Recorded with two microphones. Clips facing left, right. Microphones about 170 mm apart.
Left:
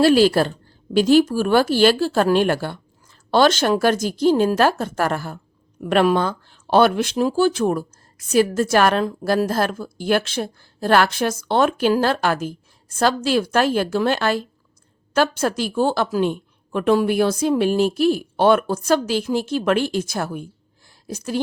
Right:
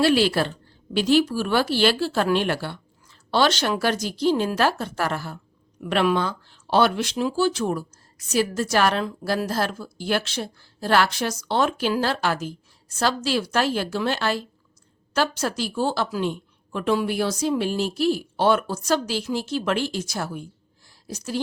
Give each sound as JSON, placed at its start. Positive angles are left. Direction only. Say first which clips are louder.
{"t": 0.0, "sound": "a woman's voice", "louder": "left 5 dB", "side_deg": 40}